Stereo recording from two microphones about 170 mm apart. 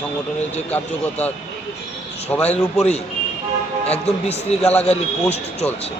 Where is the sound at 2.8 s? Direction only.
40° left (ahead or behind).